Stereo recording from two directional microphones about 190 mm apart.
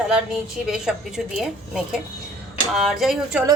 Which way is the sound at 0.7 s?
5° right (ahead or behind).